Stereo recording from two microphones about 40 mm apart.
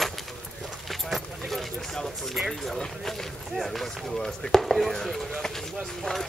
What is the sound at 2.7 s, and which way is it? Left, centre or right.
Run, centre.